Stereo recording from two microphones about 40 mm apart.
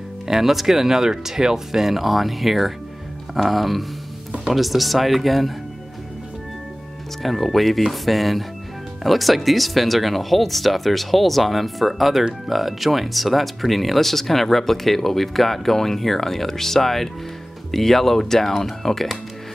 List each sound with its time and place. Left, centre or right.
0.3 s speech: centre
7.2 s speech: centre